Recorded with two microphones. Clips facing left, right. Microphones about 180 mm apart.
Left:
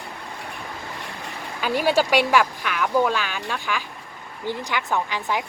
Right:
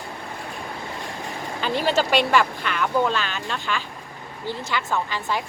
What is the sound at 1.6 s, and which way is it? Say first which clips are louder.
Speech: left 2 dB; 10° left (ahead or behind).